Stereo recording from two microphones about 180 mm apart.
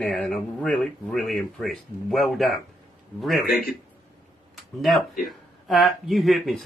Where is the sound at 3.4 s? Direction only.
50° left (ahead or behind).